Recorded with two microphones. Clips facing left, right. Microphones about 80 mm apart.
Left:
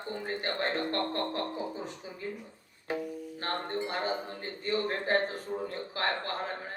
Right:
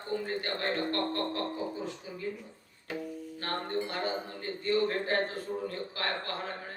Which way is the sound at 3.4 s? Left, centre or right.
Left.